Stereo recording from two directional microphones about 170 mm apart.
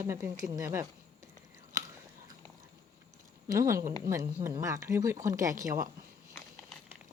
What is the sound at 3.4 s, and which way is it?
Speech, 15° right (ahead or behind).